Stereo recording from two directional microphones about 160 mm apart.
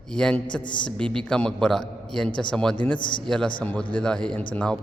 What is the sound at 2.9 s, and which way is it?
Speech, 30° left (ahead or behind).